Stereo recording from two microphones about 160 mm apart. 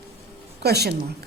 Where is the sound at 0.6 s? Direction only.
90° right.